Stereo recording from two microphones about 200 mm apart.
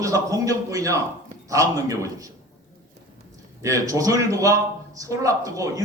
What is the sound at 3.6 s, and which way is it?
A man's voice, 15° right (ahead or behind).